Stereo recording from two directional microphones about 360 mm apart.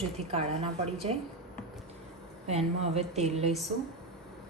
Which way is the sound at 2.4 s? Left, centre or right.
Centre.